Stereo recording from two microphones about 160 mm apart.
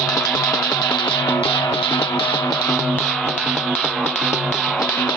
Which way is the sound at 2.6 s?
Centre (ahead or behind).